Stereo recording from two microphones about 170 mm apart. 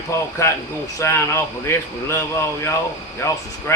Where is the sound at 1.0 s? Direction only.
15° left (ahead or behind).